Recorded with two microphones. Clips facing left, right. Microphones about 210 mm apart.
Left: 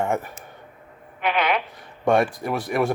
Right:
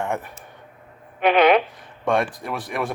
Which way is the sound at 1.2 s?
20° right (ahead or behind).